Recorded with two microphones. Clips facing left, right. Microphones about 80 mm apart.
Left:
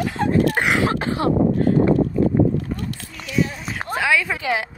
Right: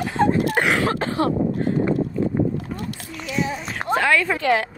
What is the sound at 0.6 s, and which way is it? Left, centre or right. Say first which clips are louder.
Throat clearing: left 1 dB; centre.